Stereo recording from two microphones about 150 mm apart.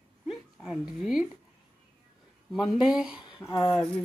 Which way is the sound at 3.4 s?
30° left (ahead or behind).